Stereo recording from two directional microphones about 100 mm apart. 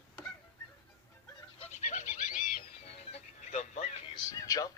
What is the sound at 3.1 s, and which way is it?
Music, 90° left.